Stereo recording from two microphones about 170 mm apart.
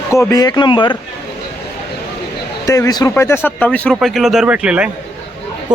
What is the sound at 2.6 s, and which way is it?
A man's voice, 20° left (ahead or behind).